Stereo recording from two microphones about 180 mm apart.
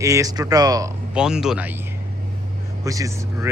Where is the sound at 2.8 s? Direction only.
20° right (ahead or behind).